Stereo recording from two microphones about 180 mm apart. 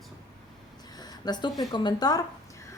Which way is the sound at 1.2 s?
20° left (ahead or behind).